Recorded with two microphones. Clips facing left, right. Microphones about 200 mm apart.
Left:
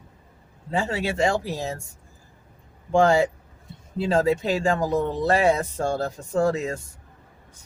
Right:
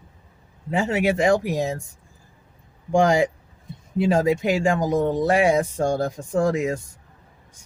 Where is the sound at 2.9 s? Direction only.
15° right (ahead or behind).